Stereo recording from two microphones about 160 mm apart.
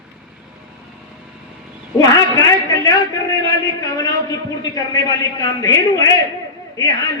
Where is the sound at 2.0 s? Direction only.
20° left (ahead or behind).